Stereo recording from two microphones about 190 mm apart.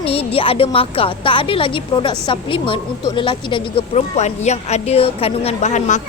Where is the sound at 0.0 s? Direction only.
30° left (ahead or behind).